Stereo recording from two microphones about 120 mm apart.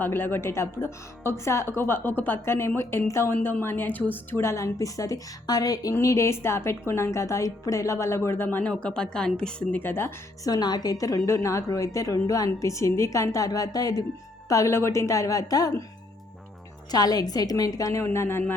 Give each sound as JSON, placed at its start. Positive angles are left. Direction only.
{"t": 0.0, "sound": "a woman's voice", "side_deg": 15}
{"t": 10.5, "sound": "a woman's voice", "side_deg": 35}
{"t": 16.9, "sound": "a woman's voice", "side_deg": 35}